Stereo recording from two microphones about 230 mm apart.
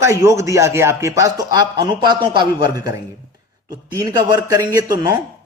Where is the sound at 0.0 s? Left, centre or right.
Centre.